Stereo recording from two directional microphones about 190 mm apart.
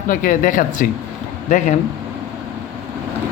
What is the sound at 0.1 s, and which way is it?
Speech, 45° left (ahead or behind).